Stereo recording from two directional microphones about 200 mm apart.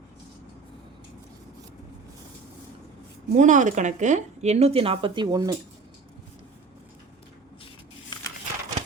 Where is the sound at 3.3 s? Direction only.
40° right (ahead or behind); by 5.5 s 20° right (ahead or behind).